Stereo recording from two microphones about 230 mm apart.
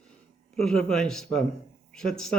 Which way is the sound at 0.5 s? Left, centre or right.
Centre.